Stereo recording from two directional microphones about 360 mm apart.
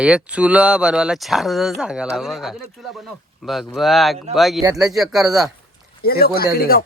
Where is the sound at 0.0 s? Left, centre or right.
Centre.